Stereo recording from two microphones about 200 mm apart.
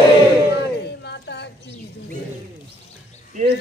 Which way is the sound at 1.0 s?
60° left (ahead or behind).